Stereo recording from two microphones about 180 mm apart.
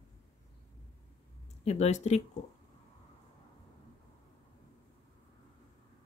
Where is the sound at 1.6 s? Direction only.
40° left (ahead or behind).